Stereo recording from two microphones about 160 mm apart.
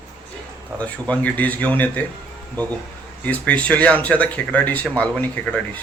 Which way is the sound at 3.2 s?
10° left (ahead or behind).